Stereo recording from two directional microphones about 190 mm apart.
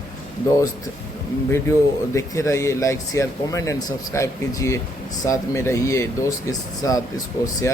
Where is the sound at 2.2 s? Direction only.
15° left (ahead or behind).